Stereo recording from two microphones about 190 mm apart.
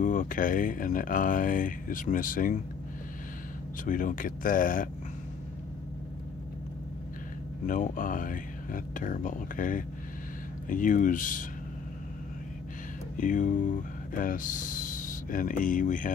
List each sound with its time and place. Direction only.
0.0 s speech: 45° left (ahead or behind)
3.8 s speech: 45° left (ahead or behind)
7.6 s speech: 45° left (ahead or behind)
13.2 s speech: 45° left (ahead or behind)